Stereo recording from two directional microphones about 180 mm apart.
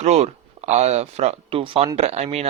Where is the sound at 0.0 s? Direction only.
35° right (ahead or behind).